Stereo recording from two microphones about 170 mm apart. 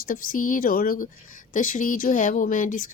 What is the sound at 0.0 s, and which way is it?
Speech, 55° left (ahead or behind).